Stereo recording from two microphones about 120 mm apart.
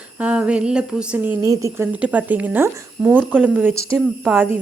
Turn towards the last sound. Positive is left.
turn(degrees=-10)  # may be behind; listen again after turning